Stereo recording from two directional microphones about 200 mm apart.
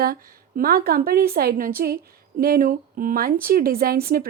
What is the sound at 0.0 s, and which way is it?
Speech, 50° right (ahead or behind).